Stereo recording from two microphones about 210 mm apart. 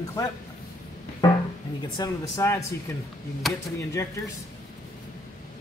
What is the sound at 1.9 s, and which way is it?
Speech, 15° left (ahead or behind).